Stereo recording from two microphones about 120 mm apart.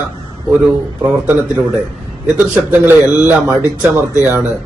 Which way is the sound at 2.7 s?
15° right (ahead or behind).